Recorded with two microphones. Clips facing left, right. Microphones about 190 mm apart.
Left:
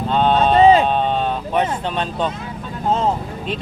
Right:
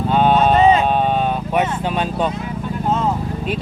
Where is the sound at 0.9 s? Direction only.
10° right (ahead or behind).